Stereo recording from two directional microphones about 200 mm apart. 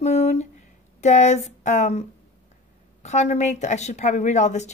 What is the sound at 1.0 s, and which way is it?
Speech, 35° left (ahead or behind).